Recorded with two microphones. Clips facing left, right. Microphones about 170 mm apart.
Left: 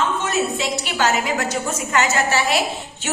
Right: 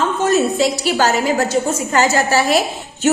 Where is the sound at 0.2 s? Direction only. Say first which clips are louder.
Right 7 dB; 40° right (ahead or behind).